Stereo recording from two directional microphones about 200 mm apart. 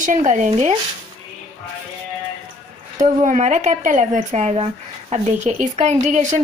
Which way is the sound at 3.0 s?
40° right (ahead or behind).